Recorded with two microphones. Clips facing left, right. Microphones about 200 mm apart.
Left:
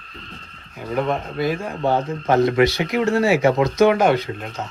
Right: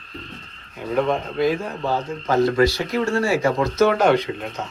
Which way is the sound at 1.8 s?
25° left (ahead or behind).